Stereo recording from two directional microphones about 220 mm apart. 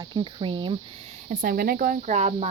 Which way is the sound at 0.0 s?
20° right (ahead or behind).